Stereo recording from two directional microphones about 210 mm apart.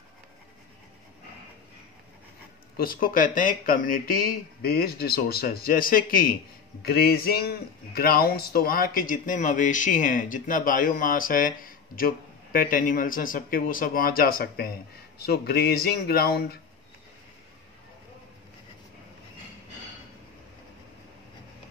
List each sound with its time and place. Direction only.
2.8 s a man's voice: 45° left (ahead or behind)